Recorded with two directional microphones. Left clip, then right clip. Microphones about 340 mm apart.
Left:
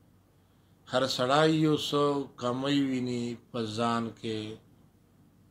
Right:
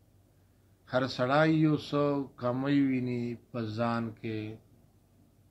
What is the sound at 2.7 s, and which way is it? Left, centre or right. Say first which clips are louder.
Speech: even; left.